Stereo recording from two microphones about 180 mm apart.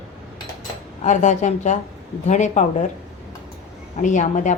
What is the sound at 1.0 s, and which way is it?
A woman's voice, 40° left (ahead or behind).